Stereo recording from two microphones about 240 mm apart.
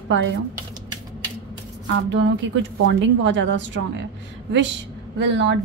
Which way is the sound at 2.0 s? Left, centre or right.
Right.